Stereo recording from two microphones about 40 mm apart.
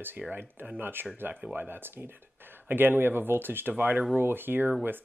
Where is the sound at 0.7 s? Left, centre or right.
Right.